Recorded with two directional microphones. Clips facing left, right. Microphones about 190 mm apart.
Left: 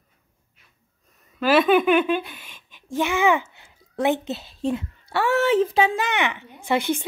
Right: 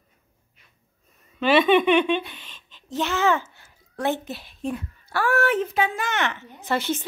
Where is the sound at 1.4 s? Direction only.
Centre (ahead or behind).